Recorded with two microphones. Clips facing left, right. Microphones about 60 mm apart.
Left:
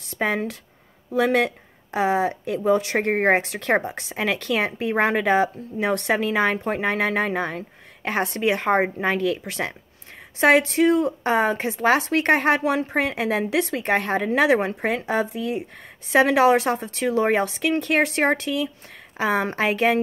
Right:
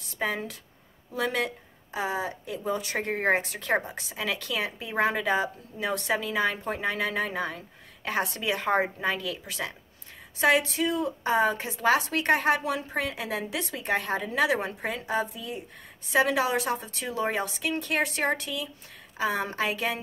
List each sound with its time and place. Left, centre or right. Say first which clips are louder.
0.1 s speech: left 6 dB; left
3.4 s speech: left 6 dB; left